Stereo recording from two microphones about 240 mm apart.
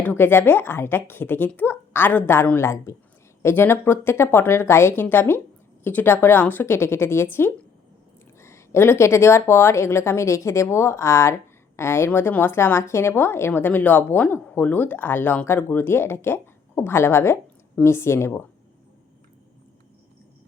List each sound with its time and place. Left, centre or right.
0.0 s a woman's voice: centre